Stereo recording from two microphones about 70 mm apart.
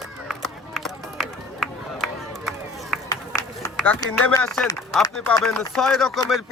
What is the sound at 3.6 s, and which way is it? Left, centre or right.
Music, left.